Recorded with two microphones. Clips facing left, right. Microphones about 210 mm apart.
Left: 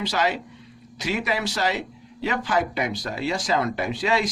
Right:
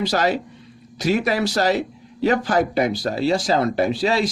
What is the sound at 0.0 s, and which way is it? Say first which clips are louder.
Speech: right 5 dB; 40° right (ahead or behind).